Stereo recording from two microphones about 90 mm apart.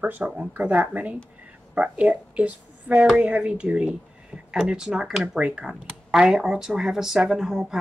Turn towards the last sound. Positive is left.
turn(degrees=-5)  # may be behind; listen again after turning